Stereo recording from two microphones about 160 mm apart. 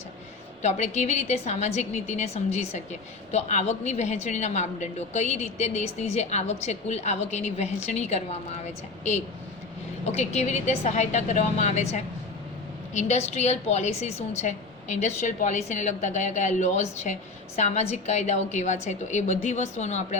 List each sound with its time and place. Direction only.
0.6 s a woman's voice: 45° left (ahead or behind)